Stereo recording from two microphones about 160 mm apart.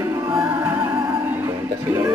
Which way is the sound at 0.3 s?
15° right (ahead or behind).